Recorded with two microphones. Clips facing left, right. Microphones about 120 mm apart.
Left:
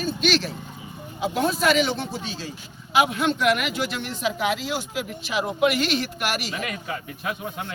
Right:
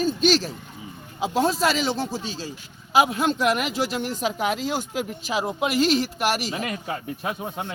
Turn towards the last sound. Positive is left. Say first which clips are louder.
# right 1 dB
turn(degrees=-35)  # may be behind; listen again after turning